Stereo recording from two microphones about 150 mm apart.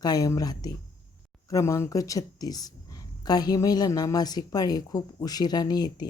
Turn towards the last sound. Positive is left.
turn(degrees=25)  # may be behind; listen again after turning